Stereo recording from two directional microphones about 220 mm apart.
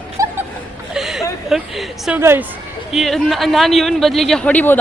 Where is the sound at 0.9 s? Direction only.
Centre (ahead or behind).